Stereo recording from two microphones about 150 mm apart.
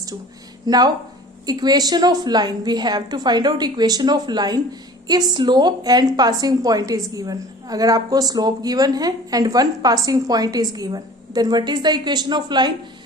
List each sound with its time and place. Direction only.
0.6 s a woman's voice: 25° right (ahead or behind)